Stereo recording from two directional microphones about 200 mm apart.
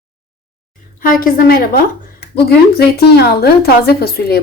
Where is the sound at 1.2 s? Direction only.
50° left (ahead or behind).